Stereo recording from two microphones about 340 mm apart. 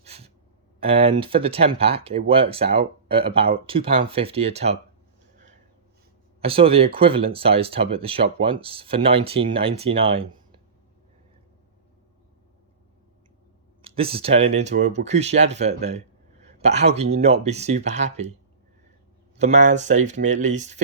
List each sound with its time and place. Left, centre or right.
0.0 s music: centre
0.8 s speech: centre
6.4 s speech: centre
13.8 s speech: centre
19.4 s speech: right